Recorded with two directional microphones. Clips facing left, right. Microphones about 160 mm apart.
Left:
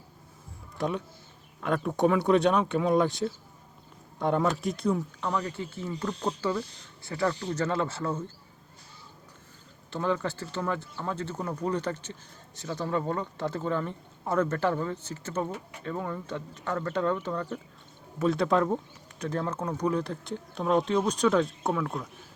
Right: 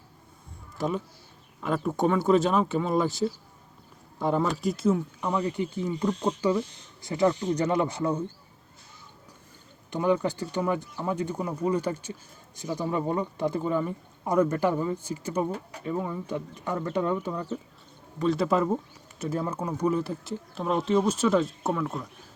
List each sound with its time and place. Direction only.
0.8 s speech: centre (ahead or behind)
5.2 s speech: 15° right (ahead or behind)
9.9 s speech: 15° right (ahead or behind)